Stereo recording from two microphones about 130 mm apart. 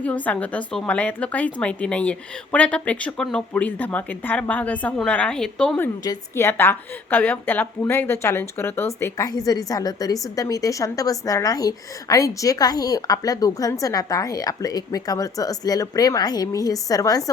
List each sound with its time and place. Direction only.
0.0 s a woman's voice: 10° left (ahead or behind)
6.0 s a woman's voice: 25° left (ahead or behind)